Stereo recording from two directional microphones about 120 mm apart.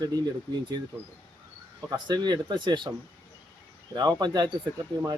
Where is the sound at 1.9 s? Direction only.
35° right (ahead or behind).